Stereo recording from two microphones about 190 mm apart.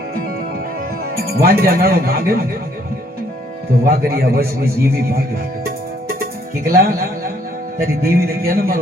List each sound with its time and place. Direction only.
1.1 s speech: 55° right (ahead or behind)
3.8 s speech: 55° right (ahead or behind)
6.7 s speech: 50° right (ahead or behind)